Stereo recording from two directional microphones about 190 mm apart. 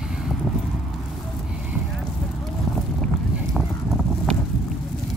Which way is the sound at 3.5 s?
Centre (ahead or behind).